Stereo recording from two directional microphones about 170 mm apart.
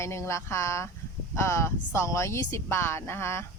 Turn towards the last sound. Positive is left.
turn(degrees=15)  # may be behind; listen again after turning